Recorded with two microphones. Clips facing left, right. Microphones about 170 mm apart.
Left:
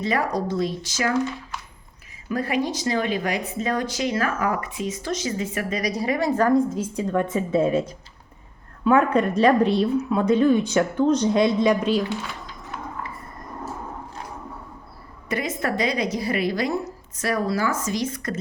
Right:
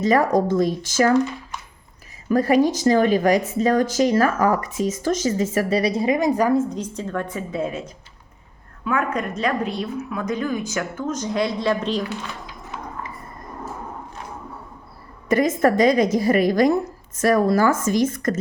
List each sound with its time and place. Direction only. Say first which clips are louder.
0.0 s a woman's voice: right 6 dB; 45° right (ahead or behind)
2.3 s a woman's voice: right 7 dB; 40° right (ahead or behind); by 12.0 s 10° left (ahead or behind)
15.3 s a woman's voice: right 8 dB; 45° right (ahead or behind)